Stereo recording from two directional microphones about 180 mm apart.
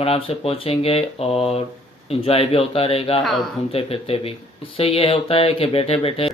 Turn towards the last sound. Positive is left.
turn(degrees=30)  # may be behind; listen again after turning